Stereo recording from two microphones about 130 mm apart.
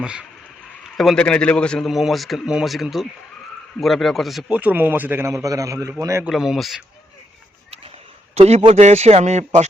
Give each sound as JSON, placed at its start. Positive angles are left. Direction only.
{"t": 0.0, "sound": "a man's voice", "side_deg": -5}
{"t": 0.9, "sound": "a man's voice", "side_deg": 5}
{"t": 6.2, "sound": "a man's voice", "side_deg": -5}
{"t": 8.4, "sound": "speech", "side_deg": -55}